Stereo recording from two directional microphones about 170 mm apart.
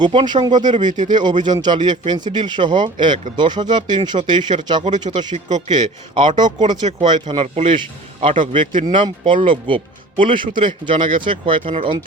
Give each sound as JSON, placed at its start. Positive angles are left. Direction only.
{"t": 0.0, "sound": "speech", "side_deg": -25}